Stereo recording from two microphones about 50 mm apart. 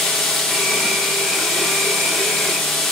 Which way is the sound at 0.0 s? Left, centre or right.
Centre.